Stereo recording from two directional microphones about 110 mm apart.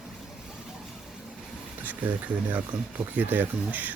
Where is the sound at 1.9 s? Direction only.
15° right (ahead or behind).